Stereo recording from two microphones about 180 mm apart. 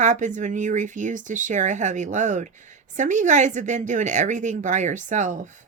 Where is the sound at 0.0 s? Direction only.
45° right (ahead or behind).